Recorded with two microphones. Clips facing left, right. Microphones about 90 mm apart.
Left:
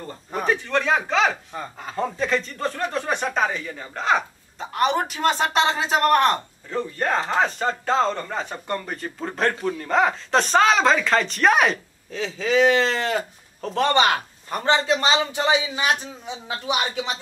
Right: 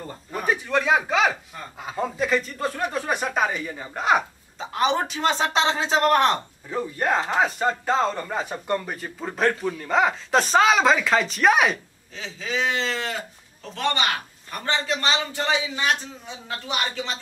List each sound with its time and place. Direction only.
0.5 s a man's voice: 10° right (ahead or behind)
4.6 s a man's voice: centre (ahead or behind)
12.1 s a man's voice: 65° left (ahead or behind); by 13.8 s 50° left (ahead or behind)
13.9 s a man's voice: 30° left (ahead or behind); by 17.2 s 15° left (ahead or behind)